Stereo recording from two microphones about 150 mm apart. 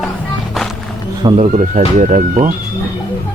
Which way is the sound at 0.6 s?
Centre (ahead or behind).